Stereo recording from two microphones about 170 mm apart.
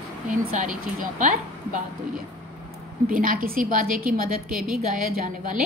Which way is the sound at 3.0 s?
55° right (ahead or behind).